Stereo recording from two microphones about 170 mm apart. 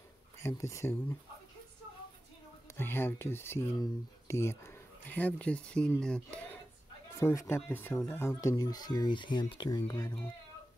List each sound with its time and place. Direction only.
0.4 s speech: 15° left (ahead or behind)
2.8 s speech: 15° left (ahead or behind)